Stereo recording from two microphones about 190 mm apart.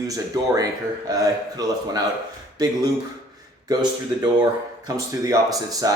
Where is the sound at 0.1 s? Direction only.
20° right (ahead or behind).